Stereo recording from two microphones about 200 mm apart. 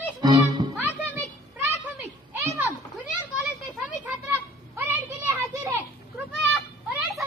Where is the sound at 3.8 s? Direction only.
5° right (ahead or behind).